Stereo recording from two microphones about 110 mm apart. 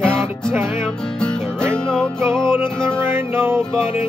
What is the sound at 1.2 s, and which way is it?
Music, 5° left (ahead or behind).